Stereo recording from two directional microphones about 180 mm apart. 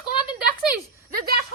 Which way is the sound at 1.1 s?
55° right (ahead or behind).